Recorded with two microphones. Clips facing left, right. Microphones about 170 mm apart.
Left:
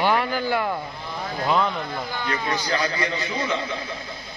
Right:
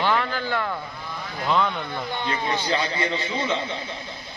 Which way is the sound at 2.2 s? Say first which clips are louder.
Even; 25° right (ahead or behind).